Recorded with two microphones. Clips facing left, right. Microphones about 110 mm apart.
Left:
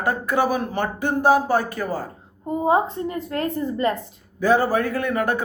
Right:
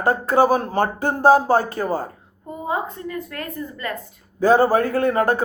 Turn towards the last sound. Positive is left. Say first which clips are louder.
# right 4 dB
turn(degrees=-35)  # may be behind; listen again after turning